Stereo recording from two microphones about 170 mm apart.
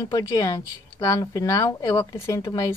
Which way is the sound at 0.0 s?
20° left (ahead or behind).